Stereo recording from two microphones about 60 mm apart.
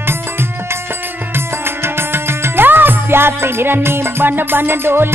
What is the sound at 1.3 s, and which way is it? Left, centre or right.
Music, right.